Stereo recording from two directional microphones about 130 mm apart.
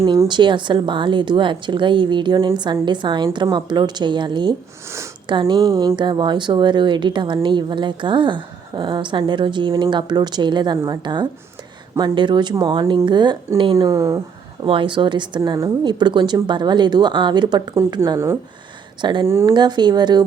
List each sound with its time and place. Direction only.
0.3 s a woman's voice: 35° right (ahead or behind)
5.7 s speech: 25° right (ahead or behind)
6.0 s a woman's voice: 35° right (ahead or behind)
13.7 s speech: 25° right (ahead or behind)
14.6 s a woman's voice: 40° right (ahead or behind); by 19.5 s 20° right (ahead or behind)
19.5 s a woman's voice: 35° right (ahead or behind)